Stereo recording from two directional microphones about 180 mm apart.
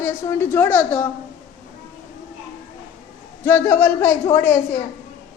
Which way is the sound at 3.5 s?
10° left (ahead or behind).